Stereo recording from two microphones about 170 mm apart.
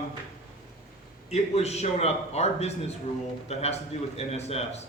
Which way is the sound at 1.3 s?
40° left (ahead or behind).